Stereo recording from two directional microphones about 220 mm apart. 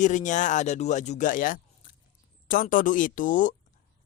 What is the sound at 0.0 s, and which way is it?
Speech, 35° left (ahead or behind).